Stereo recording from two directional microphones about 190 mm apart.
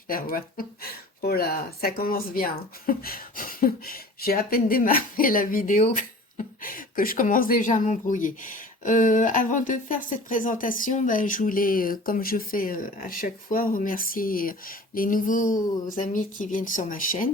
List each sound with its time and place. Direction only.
0.1 s speech: 50° left (ahead or behind)